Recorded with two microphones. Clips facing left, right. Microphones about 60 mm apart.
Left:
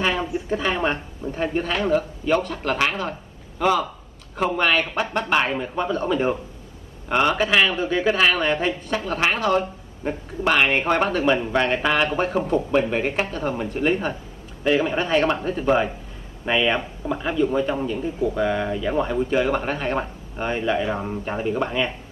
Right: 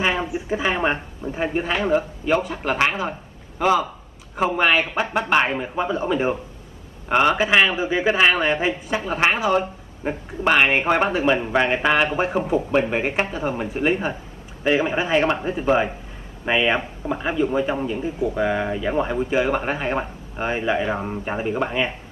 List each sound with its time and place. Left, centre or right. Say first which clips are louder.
0.0 s speech: right 1 dB; centre